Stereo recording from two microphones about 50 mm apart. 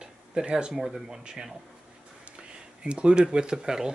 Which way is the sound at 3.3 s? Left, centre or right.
Centre.